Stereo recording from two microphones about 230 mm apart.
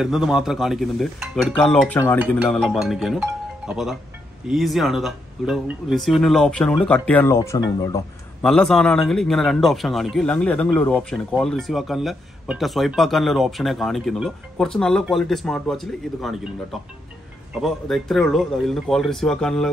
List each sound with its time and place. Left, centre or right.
0.0 s a man's voice: centre
8.4 s a man's voice: centre
17.6 s a man's voice: centre